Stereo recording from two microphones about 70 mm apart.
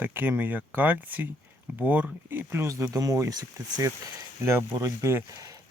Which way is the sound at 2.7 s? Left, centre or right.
Right.